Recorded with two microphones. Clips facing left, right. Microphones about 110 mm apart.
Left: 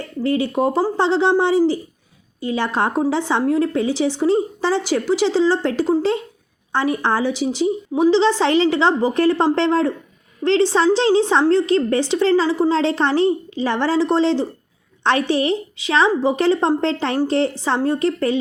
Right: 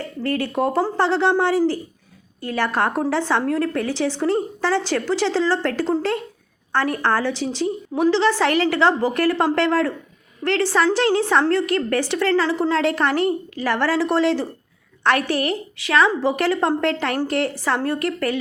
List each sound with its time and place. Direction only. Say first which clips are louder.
0.2 s a woman's voice: left 3 dB; 15° left (ahead or behind)